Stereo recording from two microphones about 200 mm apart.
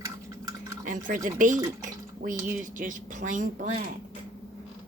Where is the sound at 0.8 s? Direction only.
40° right (ahead or behind).